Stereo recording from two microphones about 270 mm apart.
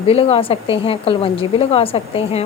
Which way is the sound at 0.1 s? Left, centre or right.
Left.